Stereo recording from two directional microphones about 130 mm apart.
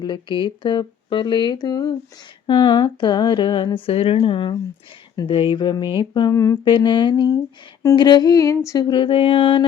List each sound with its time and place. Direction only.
0.0 s speech: 35° left (ahead or behind)
6.3 s humming: 25° left (ahead or behind)
6.7 s speech: 40° left (ahead or behind)